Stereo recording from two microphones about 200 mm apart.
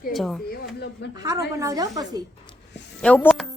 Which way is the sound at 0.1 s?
Centre (ahead or behind).